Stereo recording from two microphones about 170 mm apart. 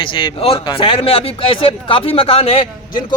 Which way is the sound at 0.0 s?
30° left (ahead or behind).